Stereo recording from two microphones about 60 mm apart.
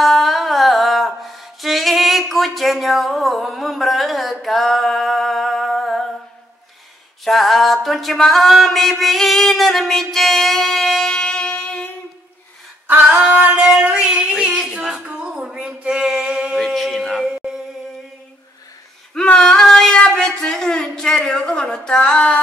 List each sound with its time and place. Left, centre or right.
0.0 s music: centre
7.2 s mantra: centre
12.8 s female singing: right
13.2 s singing: right
13.7 s female singing: centre
13.9 s singing: centre
14.3 s female singing: centre
15.0 s a sound: centre
16.5 s music: centre
17.2 s a sound: centre
19.3 s a sound: centre
21.3 s speech: centre